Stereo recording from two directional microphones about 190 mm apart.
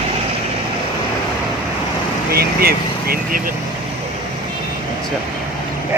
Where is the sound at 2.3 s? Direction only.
55° right (ahead or behind).